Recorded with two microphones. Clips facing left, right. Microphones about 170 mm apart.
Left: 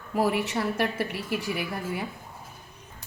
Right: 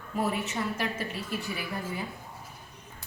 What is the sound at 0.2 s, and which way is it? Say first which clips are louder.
A woman's voice: left 5 dB; 75° left (ahead or behind).